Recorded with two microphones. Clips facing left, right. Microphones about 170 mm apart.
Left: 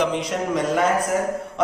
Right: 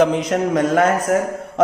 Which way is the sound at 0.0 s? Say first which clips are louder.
Right 6 dB; 50° right (ahead or behind).